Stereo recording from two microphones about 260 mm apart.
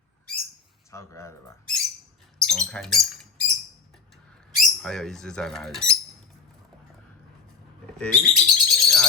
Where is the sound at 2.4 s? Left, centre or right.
Centre.